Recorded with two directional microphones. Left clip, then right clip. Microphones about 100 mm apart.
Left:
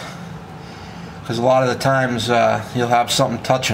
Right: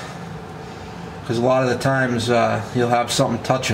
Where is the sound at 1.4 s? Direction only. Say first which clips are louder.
Left 3 dB; 30° left (ahead or behind).